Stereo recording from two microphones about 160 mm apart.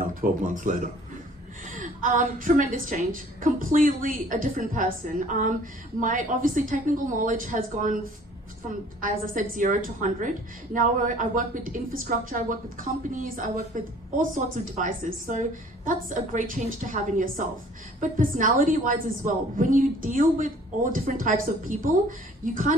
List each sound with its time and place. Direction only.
0.0 s a woman's voice: 60° right (ahead or behind)
9.0 s a woman's voice: 55° right (ahead or behind)